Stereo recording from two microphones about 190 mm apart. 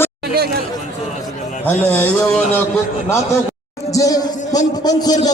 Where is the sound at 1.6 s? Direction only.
10° left (ahead or behind).